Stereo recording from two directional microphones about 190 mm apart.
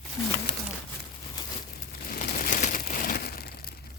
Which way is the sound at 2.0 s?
50° left (ahead or behind).